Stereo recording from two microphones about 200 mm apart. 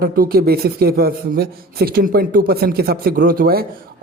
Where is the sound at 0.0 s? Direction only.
50° right (ahead or behind).